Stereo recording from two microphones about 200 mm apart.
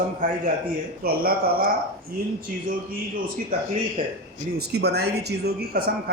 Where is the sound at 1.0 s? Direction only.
50° right (ahead or behind).